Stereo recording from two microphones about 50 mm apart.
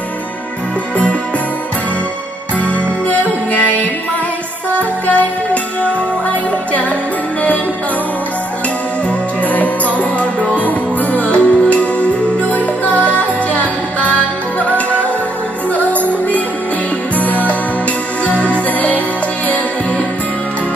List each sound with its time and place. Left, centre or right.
2.6 s music: left
5.0 s music: left
9.4 s music: left
16.1 s music: left